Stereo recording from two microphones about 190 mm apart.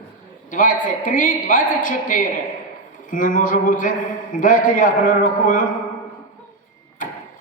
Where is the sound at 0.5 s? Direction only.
45° left (ahead or behind).